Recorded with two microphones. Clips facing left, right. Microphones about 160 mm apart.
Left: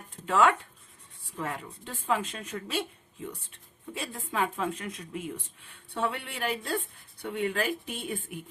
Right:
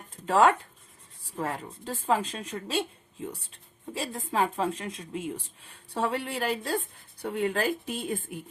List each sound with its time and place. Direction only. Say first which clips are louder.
0.3 s a woman's voice: right 2 dB; 35° right (ahead or behind)